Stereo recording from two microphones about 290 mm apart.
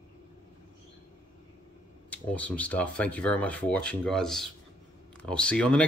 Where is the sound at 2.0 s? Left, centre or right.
Centre.